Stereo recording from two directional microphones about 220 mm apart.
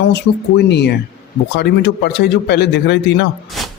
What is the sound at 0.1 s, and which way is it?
Speech, 50° left (ahead or behind).